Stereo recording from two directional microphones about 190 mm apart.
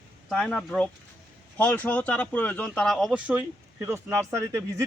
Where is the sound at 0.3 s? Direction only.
Centre (ahead or behind).